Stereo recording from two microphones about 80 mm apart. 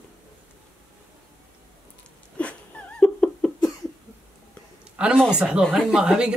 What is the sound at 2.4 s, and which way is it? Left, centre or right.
Cat, centre.